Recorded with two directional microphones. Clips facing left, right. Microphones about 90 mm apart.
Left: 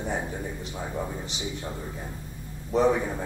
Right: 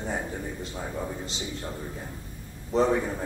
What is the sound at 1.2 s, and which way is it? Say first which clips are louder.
Speech: left 1 dB; 20° left (ahead or behind).